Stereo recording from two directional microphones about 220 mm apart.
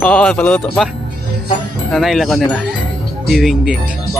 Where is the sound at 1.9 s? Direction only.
Centre (ahead or behind).